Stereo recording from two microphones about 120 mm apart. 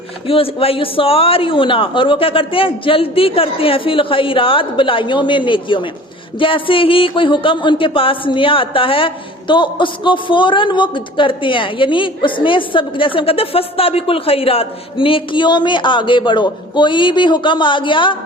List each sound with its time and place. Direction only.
0.3 s speech: 50° left (ahead or behind)